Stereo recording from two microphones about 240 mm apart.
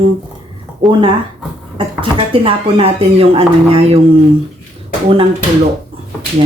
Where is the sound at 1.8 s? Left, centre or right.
Right.